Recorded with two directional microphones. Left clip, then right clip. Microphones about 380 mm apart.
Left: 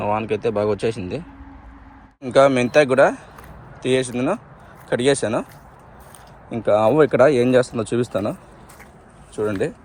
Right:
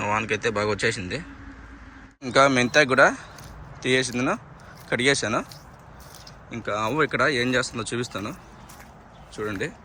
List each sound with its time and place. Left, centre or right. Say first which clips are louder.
0.0 s speech: left 3 dB; centre
2.2 s speech: left 4 dB; centre
6.5 s speech: left 10 dB; centre